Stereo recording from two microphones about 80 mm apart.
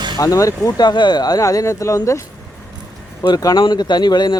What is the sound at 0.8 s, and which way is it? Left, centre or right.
Speech, left.